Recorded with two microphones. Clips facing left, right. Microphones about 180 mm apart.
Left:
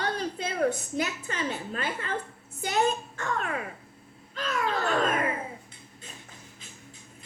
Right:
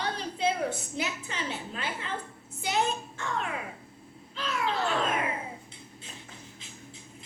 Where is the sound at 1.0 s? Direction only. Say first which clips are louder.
Left 2 dB; 50° left (ahead or behind).